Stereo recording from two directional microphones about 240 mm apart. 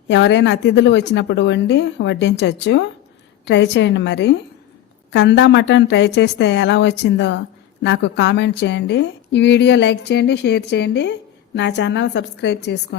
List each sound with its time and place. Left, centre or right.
0.1 s a woman's voice: left